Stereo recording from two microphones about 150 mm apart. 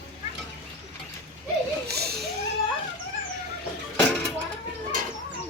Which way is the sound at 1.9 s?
90° right.